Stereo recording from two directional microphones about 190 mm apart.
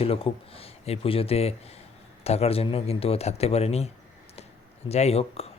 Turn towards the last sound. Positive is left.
turn(degrees=35)  # may be behind; listen again after turning